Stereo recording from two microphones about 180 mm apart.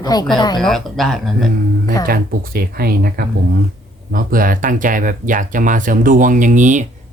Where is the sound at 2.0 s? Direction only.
55° right (ahead or behind).